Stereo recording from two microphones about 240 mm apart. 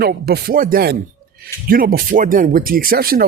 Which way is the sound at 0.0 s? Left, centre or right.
Right.